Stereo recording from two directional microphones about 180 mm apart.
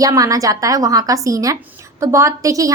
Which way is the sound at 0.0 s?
20° right (ahead or behind).